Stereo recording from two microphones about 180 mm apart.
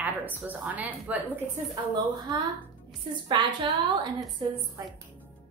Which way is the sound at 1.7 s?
25° right (ahead or behind).